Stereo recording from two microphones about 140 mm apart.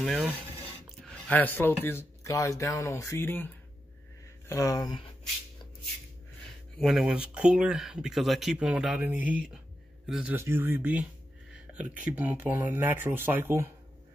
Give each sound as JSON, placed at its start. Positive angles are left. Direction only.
{"t": 0.0, "sound": "speech", "side_deg": -5}
{"t": 1.0, "sound": "speech", "side_deg": 10}
{"t": 6.8, "sound": "speech", "side_deg": -5}